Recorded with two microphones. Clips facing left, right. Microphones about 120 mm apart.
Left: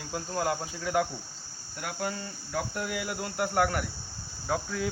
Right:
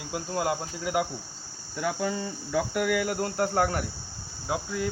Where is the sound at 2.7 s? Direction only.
65° right (ahead or behind).